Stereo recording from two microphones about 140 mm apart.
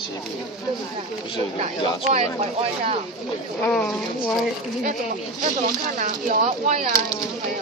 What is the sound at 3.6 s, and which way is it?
Speech, 5° left (ahead or behind).